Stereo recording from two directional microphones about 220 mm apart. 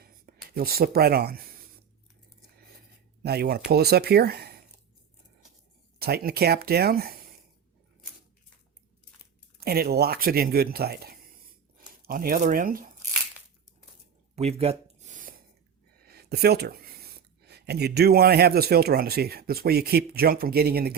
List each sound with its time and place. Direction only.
0.0 s speech: 45° right (ahead or behind)
3.2 s speech: 45° right (ahead or behind)
6.0 s speech: 45° right (ahead or behind)
9.6 s speech: 45° right (ahead or behind)
14.3 s a sound: 30° right (ahead or behind)
16.0 s speech: 45° right (ahead or behind)